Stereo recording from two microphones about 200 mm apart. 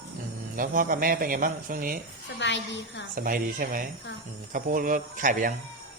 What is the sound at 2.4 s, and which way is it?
Speech, 65° left (ahead or behind).